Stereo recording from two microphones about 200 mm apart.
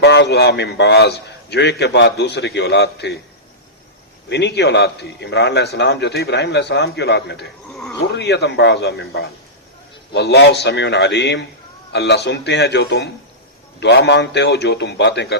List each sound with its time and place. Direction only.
0.0 s a man's voice: 60° left (ahead or behind)
4.3 s a man's voice: 60° left (ahead or behind)
7.7 s dog: centre (ahead or behind)
8.0 s a man's voice: 55° left (ahead or behind)